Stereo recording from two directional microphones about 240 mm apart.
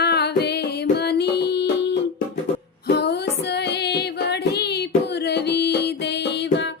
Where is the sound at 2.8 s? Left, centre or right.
Left.